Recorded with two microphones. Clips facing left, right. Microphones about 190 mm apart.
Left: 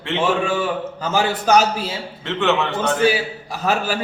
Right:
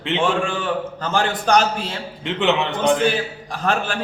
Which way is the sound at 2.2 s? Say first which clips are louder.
Even; 15° right (ahead or behind).